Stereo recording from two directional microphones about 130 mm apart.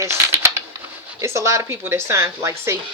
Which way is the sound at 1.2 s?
20° right (ahead or behind).